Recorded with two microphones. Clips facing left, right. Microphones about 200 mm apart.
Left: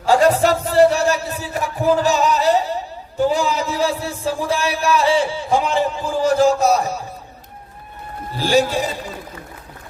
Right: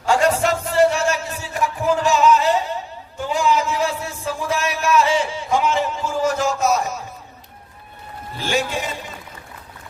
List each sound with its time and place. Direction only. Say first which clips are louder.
0.0 s music: left 3 dB; 35° left (ahead or behind)
8.4 s a man's voice: left 6 dB; 35° left (ahead or behind)